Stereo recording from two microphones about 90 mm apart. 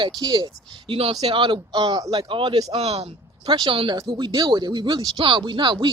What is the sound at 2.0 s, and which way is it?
Speech, 80° right.